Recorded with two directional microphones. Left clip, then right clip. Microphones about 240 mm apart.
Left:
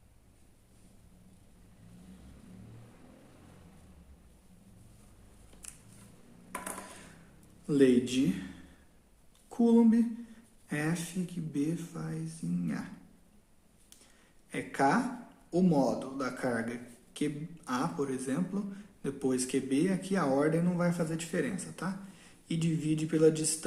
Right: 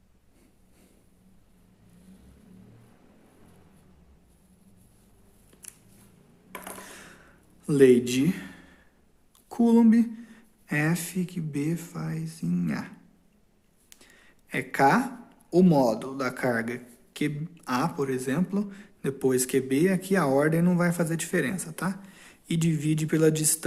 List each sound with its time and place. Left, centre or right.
7.7 s a man's voice: right
14.5 s a man's voice: right